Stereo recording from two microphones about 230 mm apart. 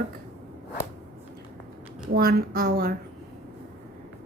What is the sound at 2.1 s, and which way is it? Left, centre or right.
Speech, right.